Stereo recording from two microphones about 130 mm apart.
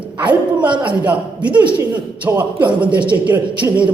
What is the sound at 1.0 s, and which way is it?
A woman's voice, 10° right (ahead or behind).